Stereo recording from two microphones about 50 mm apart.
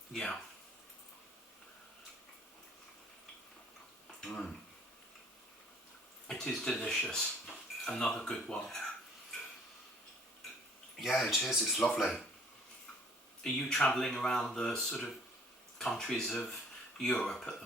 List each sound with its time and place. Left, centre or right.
0.1 s speech: centre
4.2 s speech: centre
6.2 s speech: centre
11.0 s speech: centre
11.8 s speech: centre
13.4 s speech: centre